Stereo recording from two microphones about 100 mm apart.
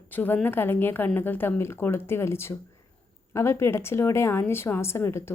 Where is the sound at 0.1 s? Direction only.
20° left (ahead or behind).